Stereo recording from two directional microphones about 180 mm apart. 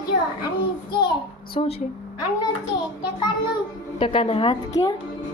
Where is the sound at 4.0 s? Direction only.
30° left (ahead or behind).